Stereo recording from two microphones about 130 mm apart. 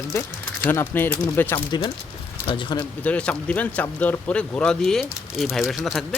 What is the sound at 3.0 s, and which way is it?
Speech, 10° left (ahead or behind).